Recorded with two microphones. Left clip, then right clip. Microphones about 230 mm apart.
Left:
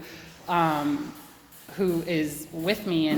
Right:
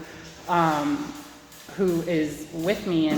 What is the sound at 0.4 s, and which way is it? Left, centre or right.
Speech, left.